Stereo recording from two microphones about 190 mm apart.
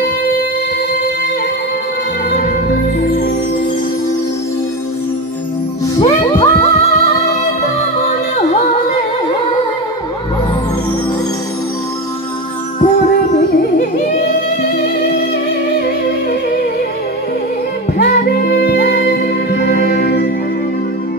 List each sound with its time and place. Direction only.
5.9 s music: 25° left (ahead or behind)
12.8 s music: 45° left (ahead or behind)
17.9 s music: 50° left (ahead or behind)